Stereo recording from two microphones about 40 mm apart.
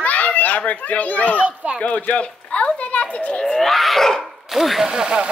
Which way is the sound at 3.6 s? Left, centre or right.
Centre.